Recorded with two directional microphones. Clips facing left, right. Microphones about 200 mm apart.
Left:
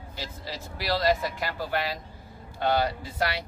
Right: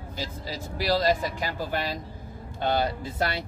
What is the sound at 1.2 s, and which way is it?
Speech, 15° right (ahead or behind).